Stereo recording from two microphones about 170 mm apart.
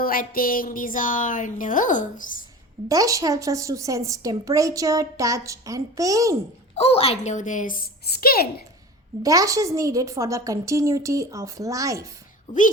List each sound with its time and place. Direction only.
0.0 s speech: 60° left (ahead or behind)
2.9 s a woman's voice: 20° right (ahead or behind)
6.7 s speech: 35° left (ahead or behind); by 8.6 s 60° left (ahead or behind)
9.2 s a woman's voice: 20° right (ahead or behind)